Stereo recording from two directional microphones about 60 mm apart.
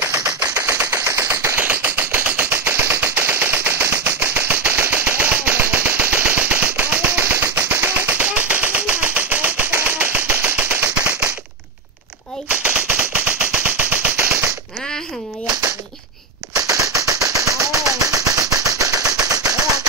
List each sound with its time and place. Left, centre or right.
1.1 s a sound: right
1.6 s machine gun: right
12.4 s machine gun: right
16.5 s gunshot: right
17.3 s machine gun: right
19.2 s gunshot: right